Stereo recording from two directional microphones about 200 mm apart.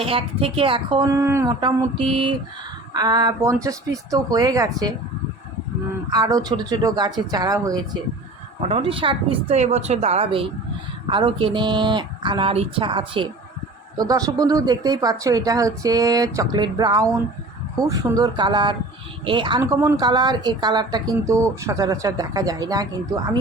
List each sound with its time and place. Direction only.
0.0 s speech: 30° right (ahead or behind)
2.9 s speech: 20° right (ahead or behind)
6.1 s speech: 20° right (ahead or behind)
8.6 s speech: 30° right (ahead or behind)